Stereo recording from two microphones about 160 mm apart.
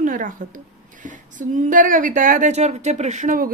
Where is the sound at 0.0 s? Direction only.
55° right (ahead or behind).